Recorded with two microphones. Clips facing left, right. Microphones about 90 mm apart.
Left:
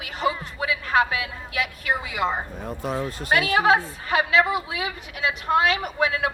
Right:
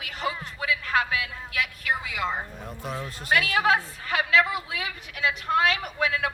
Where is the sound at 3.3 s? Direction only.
20° left (ahead or behind).